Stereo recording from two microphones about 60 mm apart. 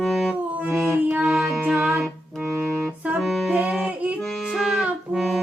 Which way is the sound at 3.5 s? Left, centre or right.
Right.